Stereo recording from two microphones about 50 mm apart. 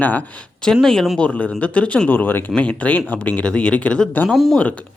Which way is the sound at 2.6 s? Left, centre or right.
Left.